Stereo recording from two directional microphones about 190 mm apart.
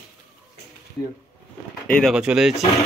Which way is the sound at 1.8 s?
5° left (ahead or behind).